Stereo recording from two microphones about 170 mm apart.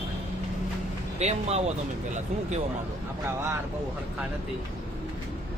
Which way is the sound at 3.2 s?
15° right (ahead or behind).